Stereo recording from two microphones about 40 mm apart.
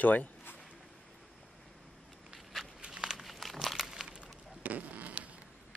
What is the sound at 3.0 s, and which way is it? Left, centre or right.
Crumpling, centre.